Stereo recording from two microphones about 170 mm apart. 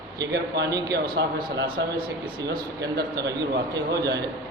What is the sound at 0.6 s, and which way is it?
Speech, 20° right (ahead or behind).